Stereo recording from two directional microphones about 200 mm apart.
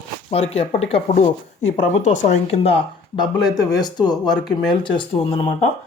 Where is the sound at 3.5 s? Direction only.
20° left (ahead or behind).